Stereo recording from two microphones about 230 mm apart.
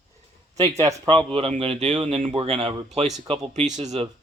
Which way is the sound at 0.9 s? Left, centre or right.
Right.